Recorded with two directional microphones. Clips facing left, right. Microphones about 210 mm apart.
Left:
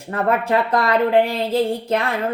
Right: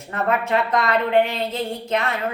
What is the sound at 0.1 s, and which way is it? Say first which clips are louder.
Speech: left 3 dB; 30° left (ahead or behind).